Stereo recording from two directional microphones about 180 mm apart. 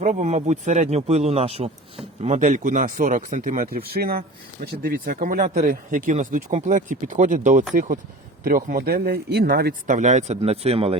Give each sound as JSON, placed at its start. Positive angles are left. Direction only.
{"t": 0.0, "sound": "speech", "side_deg": -40}
{"t": 9.9, "sound": "speech", "side_deg": -40}